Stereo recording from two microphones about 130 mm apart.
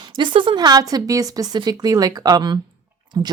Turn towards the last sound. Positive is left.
turn(degrees=-35)  # may be behind; listen again after turning